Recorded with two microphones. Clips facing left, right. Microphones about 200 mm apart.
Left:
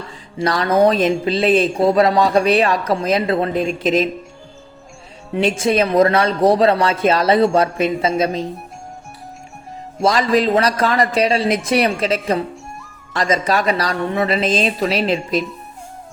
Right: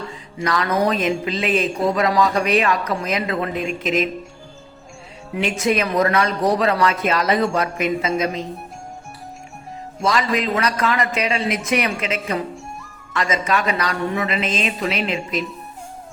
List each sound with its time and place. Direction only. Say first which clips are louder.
0.1 s a woman's voice: left 5 dB; 30° left (ahead or behind)
5.3 s a woman's voice: left 3 dB; 30° left (ahead or behind)
10.0 s a woman's voice: left 5 dB; 35° left (ahead or behind)